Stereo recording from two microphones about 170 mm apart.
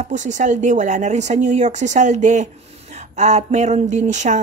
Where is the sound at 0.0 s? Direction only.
45° right (ahead or behind).